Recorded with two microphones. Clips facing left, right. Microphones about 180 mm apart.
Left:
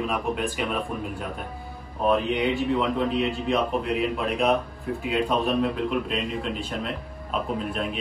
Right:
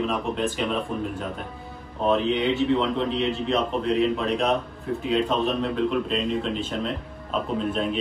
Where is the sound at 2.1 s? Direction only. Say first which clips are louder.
Right 2 dB; 5° left (ahead or behind).